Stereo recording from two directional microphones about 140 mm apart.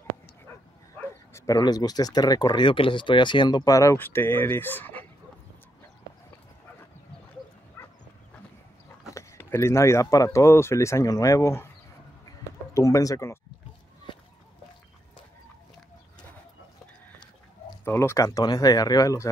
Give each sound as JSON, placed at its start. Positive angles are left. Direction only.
{"t": 0.9, "sound": "bow-wow", "side_deg": 20}
{"t": 1.6, "sound": "speech", "side_deg": 30}
{"t": 9.1, "sound": "speech", "side_deg": 20}
{"t": 12.7, "sound": "speech", "side_deg": 25}
{"t": 17.8, "sound": "speech", "side_deg": 20}